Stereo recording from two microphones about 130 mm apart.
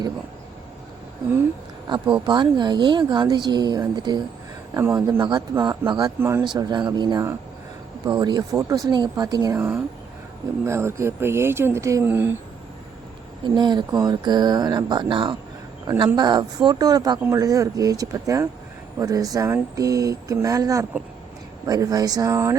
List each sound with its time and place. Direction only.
2.2 s speech: 35° right (ahead or behind)
4.8 s speech: 25° right (ahead or behind)
5.6 s speech: 35° right (ahead or behind)
6.1 s speech: 20° right (ahead or behind)
6.4 s speech: 35° right (ahead or behind)
9.6 s speech: 20° right (ahead or behind)
13.4 s speech: 35° right (ahead or behind)